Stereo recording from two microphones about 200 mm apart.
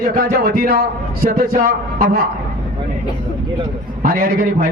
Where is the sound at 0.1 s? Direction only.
50° right (ahead or behind).